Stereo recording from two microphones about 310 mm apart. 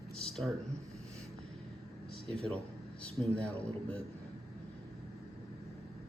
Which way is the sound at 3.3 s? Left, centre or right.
Centre.